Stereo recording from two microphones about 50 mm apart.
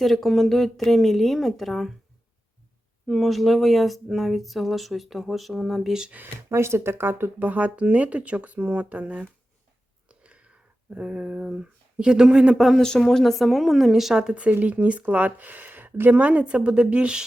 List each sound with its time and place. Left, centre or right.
0.0 s speech: centre
3.1 s speech: centre
6.5 s speech: right
10.1 s a sound: right
12.5 s speech: centre
13.1 s speech: centre
14.2 s speech: right